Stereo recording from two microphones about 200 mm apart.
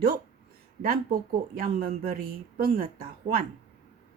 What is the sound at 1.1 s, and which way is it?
Speech, 45° right (ahead or behind).